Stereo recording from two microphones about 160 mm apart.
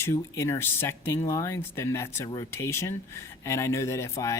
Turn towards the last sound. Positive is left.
turn(degrees=20)  # may be behind; listen again after turning